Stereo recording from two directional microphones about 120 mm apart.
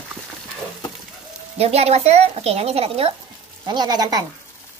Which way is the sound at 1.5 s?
60° right (ahead or behind).